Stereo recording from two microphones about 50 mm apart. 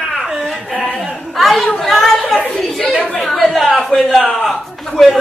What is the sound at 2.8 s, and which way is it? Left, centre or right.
Speech, left.